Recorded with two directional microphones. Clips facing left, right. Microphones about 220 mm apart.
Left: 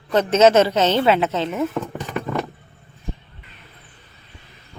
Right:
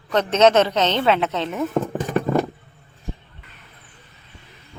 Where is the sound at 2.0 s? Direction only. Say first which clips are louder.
Right 5 dB; 45° right (ahead or behind).